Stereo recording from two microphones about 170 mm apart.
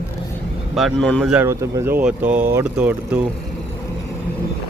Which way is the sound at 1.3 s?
15° right (ahead or behind).